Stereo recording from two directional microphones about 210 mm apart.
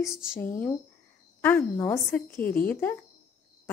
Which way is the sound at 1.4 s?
10° left (ahead or behind).